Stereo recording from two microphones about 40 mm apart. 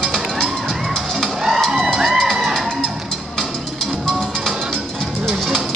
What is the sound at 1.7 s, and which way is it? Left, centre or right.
Music, centre.